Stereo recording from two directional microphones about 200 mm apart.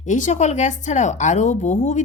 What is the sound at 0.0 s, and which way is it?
A woman's voice, 35° left (ahead or behind).